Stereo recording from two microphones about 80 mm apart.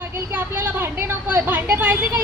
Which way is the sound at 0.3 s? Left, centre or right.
Right.